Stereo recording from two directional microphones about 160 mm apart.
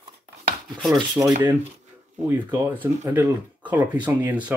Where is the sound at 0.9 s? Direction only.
20° right (ahead or behind).